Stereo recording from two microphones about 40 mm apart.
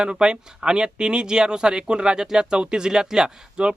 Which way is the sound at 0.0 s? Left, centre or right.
Right.